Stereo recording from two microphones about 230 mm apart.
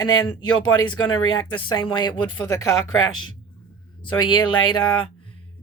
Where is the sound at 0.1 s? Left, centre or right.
Left.